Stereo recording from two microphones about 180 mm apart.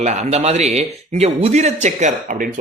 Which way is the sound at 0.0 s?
40° right (ahead or behind).